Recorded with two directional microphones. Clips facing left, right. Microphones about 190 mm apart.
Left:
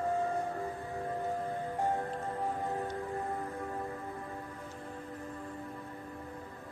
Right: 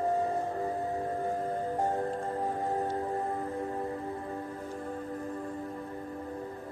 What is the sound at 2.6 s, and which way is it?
Music, 40° right (ahead or behind).